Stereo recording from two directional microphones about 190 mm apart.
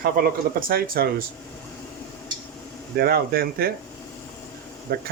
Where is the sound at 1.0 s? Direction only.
55° right (ahead or behind).